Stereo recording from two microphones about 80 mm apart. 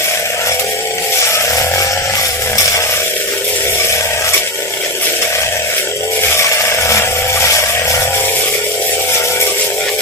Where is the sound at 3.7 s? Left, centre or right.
Left.